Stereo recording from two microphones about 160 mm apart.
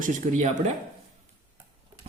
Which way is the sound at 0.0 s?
50° right (ahead or behind).